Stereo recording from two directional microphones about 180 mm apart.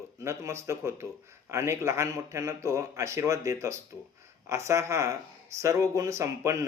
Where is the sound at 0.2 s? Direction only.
15° right (ahead or behind).